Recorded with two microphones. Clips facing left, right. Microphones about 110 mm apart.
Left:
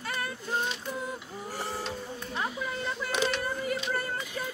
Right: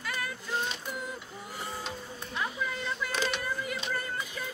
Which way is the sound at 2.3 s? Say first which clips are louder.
Even; 30° left (ahead or behind).